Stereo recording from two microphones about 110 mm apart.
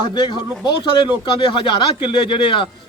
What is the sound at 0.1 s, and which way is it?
A man's voice, 45° left (ahead or behind).